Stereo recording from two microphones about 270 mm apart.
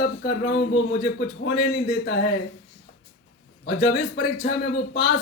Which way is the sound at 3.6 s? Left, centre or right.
Left.